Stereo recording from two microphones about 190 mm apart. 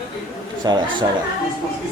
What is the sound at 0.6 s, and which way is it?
Speech, 20° right (ahead or behind).